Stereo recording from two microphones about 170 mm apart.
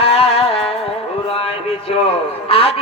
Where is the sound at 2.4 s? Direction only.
35° left (ahead or behind).